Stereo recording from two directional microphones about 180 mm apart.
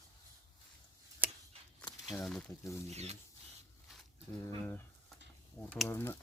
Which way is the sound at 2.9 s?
35° right (ahead or behind).